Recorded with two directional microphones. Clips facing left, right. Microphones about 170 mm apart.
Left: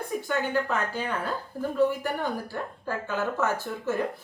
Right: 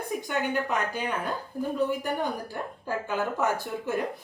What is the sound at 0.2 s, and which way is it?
Speech, 15° right (ahead or behind).